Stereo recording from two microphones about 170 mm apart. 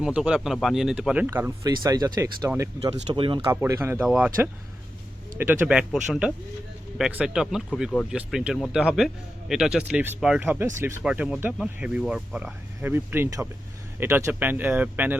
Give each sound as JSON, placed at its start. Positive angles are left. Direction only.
{"t": 0.0, "sound": "speech", "side_deg": -5}
{"t": 2.8, "sound": "speech", "side_deg": -30}
{"t": 3.5, "sound": "speech", "side_deg": -15}
{"t": 5.4, "sound": "speech", "side_deg": -10}